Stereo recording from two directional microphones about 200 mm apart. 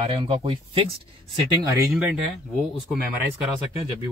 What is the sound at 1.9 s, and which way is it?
Speech, 10° right (ahead or behind).